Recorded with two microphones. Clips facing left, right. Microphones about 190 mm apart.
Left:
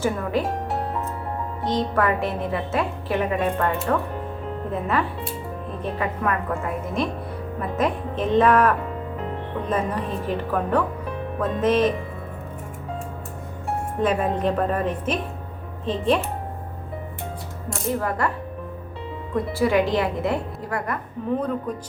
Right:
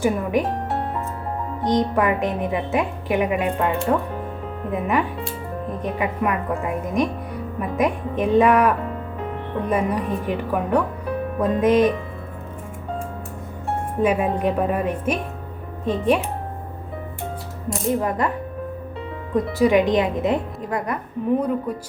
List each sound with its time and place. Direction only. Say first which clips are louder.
0.0 s a woman's voice: right 3 dB; 15° right (ahead or behind)
0.7 s music: right 1 dB; centre (ahead or behind)
1.6 s a woman's voice: right 3 dB; 15° right (ahead or behind)
14.0 s a woman's voice: right 2 dB; 10° right (ahead or behind)
17.7 s speech: right 3 dB; 20° right (ahead or behind)
19.3 s speech: right 4 dB; 20° right (ahead or behind)